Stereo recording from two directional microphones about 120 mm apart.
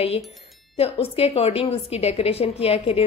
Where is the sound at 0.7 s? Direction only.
55° left (ahead or behind).